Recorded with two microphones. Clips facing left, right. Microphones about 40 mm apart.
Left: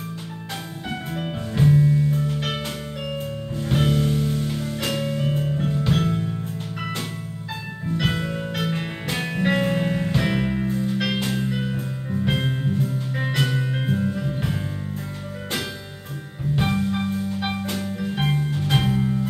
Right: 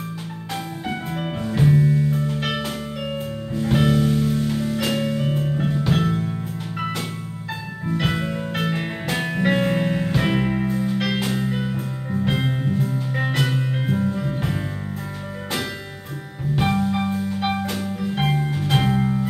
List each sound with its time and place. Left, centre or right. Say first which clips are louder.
0.8 s music: right 1 dB; centre
8.0 s music: right 1 dB; centre
10.9 s music: right 1 dB; centre
11.1 s music: right 1 dB; centre
16.5 s music: right 2 dB; centre